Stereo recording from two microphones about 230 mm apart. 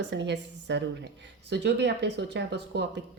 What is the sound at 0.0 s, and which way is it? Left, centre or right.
Speech, right.